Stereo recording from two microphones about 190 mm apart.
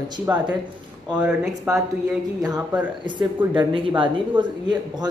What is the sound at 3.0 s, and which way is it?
Speech, 25° right (ahead or behind).